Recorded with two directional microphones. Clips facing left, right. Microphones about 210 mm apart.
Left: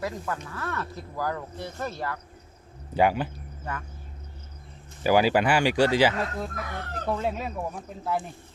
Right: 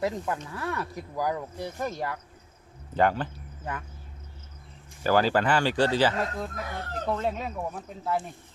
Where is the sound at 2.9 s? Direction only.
10° left (ahead or behind).